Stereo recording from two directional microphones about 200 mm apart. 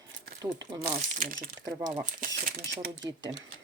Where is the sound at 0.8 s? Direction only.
45° right (ahead or behind).